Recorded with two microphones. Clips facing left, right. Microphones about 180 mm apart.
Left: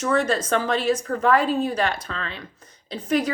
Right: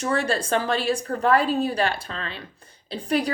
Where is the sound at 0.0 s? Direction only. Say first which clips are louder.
Left 2 dB; 35° right (ahead or behind).